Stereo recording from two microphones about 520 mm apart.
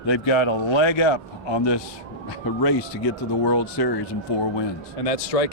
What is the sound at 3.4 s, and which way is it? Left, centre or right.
Speech, left.